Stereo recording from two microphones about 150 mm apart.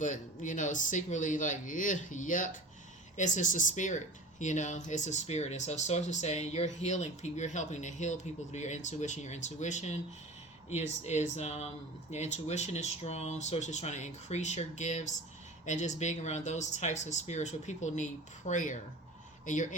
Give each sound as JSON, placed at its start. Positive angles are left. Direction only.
{"t": 0.0, "sound": "speech", "side_deg": 55}